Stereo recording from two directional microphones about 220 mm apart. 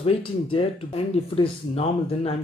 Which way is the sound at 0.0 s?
25° left (ahead or behind).